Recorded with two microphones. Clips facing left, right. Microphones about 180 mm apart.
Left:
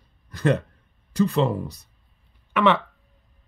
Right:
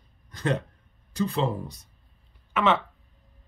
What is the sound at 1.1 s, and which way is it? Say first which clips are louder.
Speech: left 5 dB; 70° left (ahead or behind).